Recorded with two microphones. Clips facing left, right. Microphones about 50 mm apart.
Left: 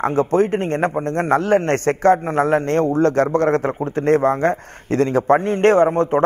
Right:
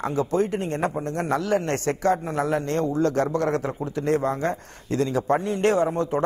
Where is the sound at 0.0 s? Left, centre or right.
Left.